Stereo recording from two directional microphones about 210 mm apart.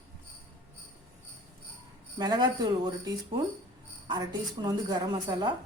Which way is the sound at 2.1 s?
20° right (ahead or behind).